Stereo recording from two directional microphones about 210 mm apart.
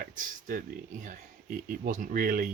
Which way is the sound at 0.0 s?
40° right (ahead or behind).